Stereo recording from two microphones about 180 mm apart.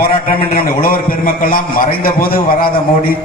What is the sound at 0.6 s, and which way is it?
Speech, 50° left (ahead or behind).